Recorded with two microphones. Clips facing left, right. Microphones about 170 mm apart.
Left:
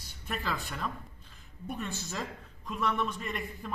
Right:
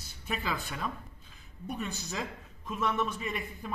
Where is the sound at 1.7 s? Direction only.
20° right (ahead or behind).